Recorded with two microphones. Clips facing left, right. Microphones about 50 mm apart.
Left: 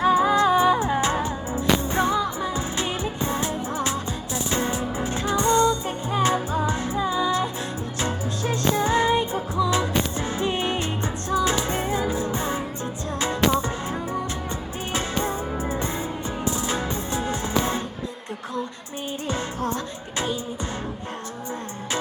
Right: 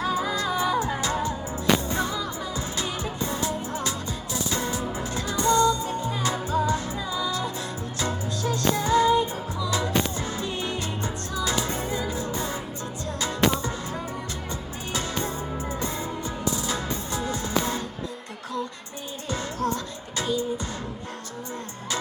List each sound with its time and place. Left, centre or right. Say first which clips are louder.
0.0 s music: left 8 dB; left
14.9 s music: left 3 dB; left
19.3 s music: right 1 dB; left